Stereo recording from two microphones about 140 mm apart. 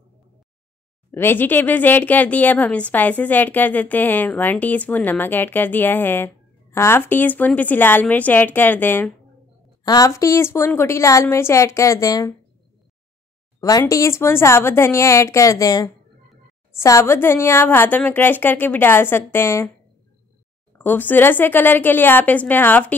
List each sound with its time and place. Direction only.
1.1 s speech: 15° left (ahead or behind)
9.8 s a woman's voice: 25° left (ahead or behind)
13.6 s a woman's voice: 25° left (ahead or behind)
20.7 s speech: 15° left (ahead or behind)